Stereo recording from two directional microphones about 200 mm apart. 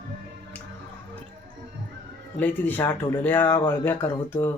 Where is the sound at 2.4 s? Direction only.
10° left (ahead or behind).